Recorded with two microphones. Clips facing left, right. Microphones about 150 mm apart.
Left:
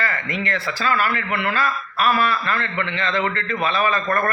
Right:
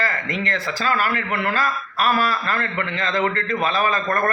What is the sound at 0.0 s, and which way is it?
A man's voice, 40° right (ahead or behind).